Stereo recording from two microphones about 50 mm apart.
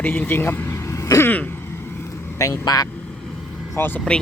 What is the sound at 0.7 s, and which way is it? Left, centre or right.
Vehicle, left.